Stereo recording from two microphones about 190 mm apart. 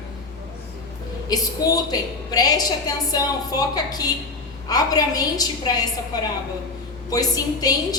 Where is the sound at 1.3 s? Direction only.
20° left (ahead or behind).